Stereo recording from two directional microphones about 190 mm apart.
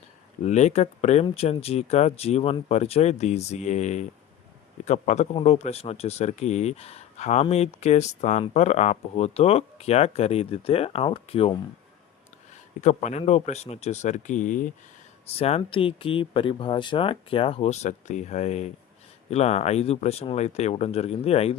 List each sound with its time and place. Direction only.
0.4 s speech: 35° left (ahead or behind)
12.8 s speech: 40° left (ahead or behind)
15.4 s speech: 30° left (ahead or behind)